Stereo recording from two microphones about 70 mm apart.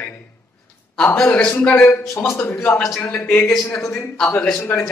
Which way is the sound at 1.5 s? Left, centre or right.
Left.